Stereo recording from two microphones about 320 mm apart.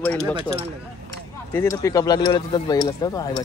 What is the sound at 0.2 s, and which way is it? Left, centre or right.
Speech, centre.